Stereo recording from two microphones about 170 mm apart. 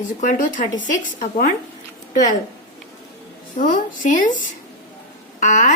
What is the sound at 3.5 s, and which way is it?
Speech, 50° left (ahead or behind).